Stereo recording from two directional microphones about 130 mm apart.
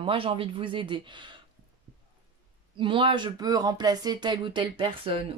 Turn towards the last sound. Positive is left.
turn(degrees=-40)  # may be behind; listen again after turning